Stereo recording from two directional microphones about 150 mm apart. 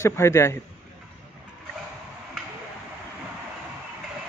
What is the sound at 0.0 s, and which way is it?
Speech, 20° left (ahead or behind).